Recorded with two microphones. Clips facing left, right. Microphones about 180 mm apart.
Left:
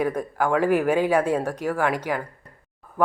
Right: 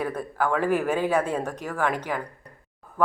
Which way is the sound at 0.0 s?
15° left (ahead or behind).